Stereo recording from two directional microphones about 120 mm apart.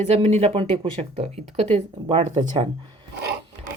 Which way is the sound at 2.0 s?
40° right (ahead or behind).